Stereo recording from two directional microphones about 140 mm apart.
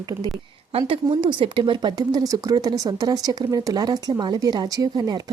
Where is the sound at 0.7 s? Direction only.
40° right (ahead or behind).